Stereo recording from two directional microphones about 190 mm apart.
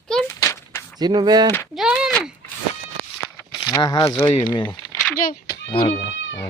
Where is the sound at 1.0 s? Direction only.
20° right (ahead or behind).